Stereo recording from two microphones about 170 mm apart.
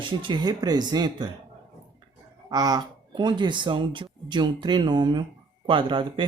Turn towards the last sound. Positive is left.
turn(degrees=-30)  # may be behind; listen again after turning